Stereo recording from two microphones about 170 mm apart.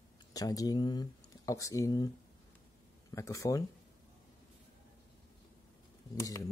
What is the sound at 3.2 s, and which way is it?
Speech, 20° left (ahead or behind).